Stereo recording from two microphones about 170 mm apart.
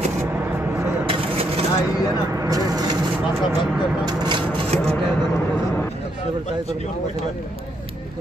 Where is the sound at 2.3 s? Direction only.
20° right (ahead or behind).